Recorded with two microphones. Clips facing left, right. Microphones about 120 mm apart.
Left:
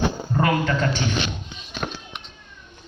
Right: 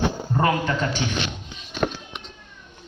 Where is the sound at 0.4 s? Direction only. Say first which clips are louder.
Left 1 dB; 20° right (ahead or behind).